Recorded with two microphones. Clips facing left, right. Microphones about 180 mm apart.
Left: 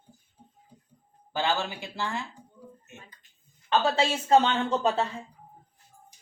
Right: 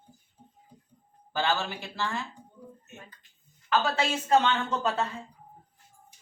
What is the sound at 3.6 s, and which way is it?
A man's voice, 25° left (ahead or behind).